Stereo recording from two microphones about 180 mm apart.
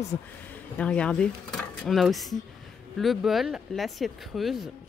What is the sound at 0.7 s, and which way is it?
Speech, 5° left (ahead or behind).